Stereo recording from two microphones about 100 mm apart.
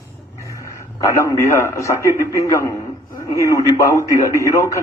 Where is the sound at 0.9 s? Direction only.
35° left (ahead or behind).